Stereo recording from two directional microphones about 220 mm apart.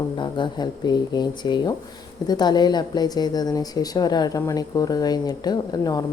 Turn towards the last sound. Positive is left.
turn(degrees=20)  # may be behind; listen again after turning